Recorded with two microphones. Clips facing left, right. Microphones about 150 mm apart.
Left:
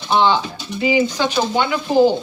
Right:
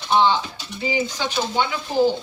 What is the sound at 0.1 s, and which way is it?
Speech, 75° left (ahead or behind).